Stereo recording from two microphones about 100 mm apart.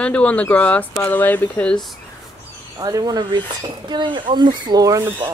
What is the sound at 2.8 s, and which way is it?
Speech, 40° right (ahead or behind).